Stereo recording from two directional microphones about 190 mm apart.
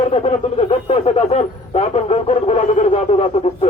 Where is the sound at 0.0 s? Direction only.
30° left (ahead or behind).